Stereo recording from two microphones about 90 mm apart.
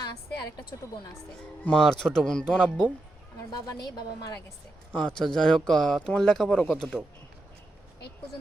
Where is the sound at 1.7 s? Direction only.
5° left (ahead or behind).